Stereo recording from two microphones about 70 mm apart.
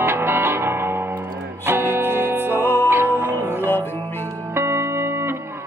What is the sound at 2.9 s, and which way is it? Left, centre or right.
Music, right.